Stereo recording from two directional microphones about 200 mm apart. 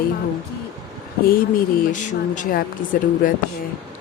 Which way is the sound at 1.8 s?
40° left (ahead or behind).